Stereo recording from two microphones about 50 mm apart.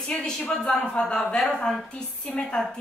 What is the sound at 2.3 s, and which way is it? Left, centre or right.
Speech, left.